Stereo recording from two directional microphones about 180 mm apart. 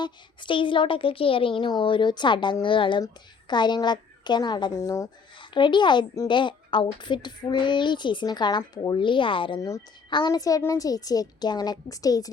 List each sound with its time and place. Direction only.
0.0 s speech: 25° left (ahead or behind)